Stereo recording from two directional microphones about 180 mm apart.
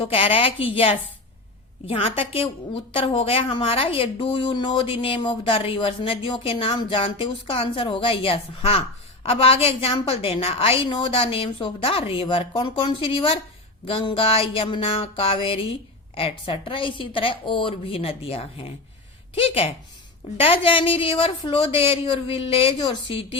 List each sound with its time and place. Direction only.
0.1 s a woman's voice: 30° left (ahead or behind)